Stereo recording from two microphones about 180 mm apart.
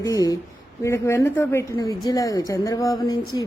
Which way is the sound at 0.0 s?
20° left (ahead or behind).